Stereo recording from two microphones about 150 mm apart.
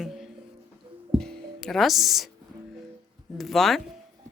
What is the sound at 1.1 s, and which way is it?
Music, 5° left (ahead or behind).